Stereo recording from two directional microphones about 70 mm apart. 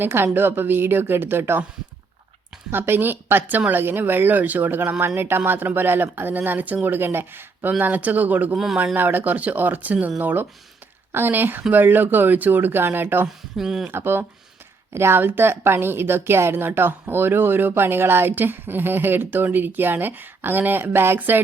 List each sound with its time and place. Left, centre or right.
0.0 s a woman's voice: right
2.7 s a woman's voice: right
8.5 s speech: centre
9.0 s speech: right
13.2 s speech: centre
13.8 s a woman's voice: right